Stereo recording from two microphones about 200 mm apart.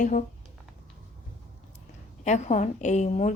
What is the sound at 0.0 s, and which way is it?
Speech, 40° left (ahead or behind).